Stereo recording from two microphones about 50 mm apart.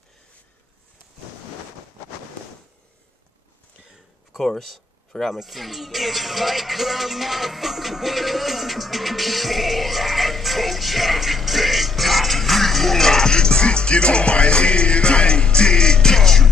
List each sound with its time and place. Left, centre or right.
4.5 s speech: centre